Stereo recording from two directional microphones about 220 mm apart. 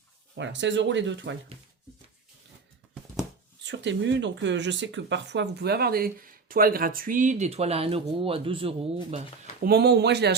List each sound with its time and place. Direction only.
0.3 s speech: 55° right (ahead or behind)
3.6 s speech: 55° right (ahead or behind); by 9.2 s 25° right (ahead or behind)
9.6 s speech: 45° right (ahead or behind)